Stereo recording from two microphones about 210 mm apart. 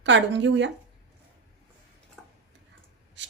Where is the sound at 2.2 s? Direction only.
Centre (ahead or behind).